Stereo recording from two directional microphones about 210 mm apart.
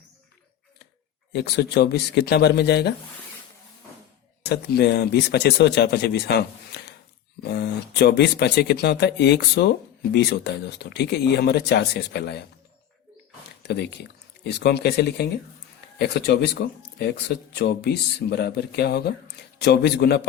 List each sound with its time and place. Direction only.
1.3 s speech: 50° left (ahead or behind)
4.4 s speech: 50° left (ahead or behind)
13.6 s speech: 50° left (ahead or behind)